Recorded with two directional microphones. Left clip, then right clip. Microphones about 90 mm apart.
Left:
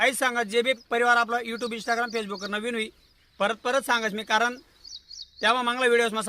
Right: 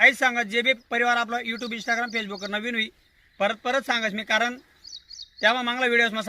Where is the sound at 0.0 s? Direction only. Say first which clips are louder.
Right 5 dB; 45° left (ahead or behind).